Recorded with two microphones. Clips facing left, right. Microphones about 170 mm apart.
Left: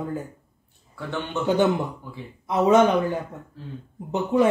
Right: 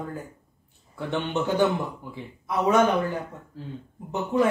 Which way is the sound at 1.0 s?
20° right (ahead or behind).